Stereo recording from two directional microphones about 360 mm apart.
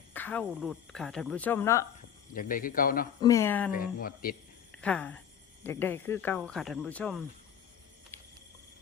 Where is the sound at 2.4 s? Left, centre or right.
Left.